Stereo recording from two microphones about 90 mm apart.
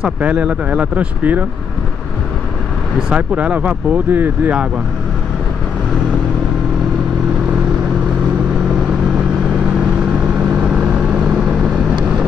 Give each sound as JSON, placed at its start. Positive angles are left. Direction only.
{"t": 0.0, "sound": "speech", "side_deg": -15}
{"t": 3.0, "sound": "speech", "side_deg": -15}
{"t": 10.5, "sound": "vehicle", "side_deg": -5}